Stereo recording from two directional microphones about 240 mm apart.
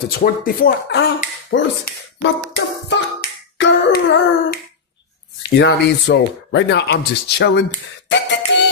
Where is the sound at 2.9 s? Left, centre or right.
Left.